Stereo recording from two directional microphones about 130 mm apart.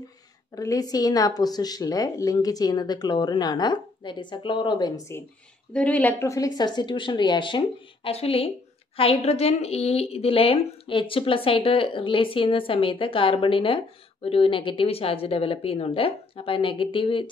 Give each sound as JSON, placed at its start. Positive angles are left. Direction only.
{"t": 0.6, "sound": "a woman's voice", "side_deg": 25}
{"t": 5.7, "sound": "a woman's voice", "side_deg": 10}
{"t": 6.2, "sound": "a woman's voice", "side_deg": 25}